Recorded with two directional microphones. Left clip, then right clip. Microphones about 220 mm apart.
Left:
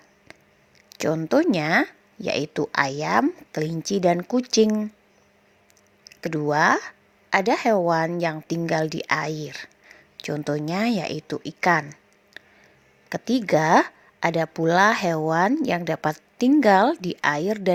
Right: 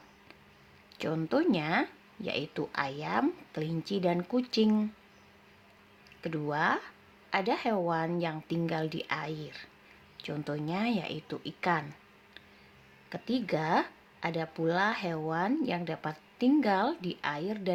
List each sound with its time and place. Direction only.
0.9 s speech: 30° left (ahead or behind)
6.2 s speech: 30° left (ahead or behind)